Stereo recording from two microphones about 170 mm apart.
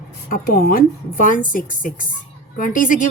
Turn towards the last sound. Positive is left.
turn(degrees=50)  # may be behind; listen again after turning